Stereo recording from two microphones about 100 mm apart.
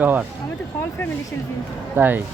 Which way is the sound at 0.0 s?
15° right (ahead or behind).